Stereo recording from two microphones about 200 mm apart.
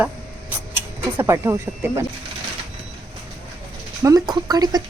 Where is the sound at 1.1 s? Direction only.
10° right (ahead or behind).